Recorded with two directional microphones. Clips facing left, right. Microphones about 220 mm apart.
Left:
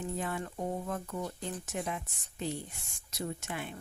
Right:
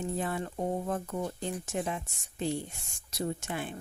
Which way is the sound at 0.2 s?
30° right (ahead or behind).